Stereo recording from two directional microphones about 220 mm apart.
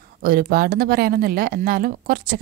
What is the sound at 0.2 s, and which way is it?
A woman's voice, 45° right (ahead or behind).